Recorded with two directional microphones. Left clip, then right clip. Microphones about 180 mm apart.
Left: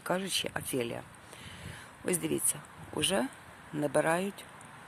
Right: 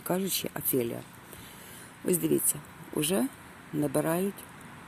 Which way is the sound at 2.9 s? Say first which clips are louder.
Right 1 dB; centre (ahead or behind).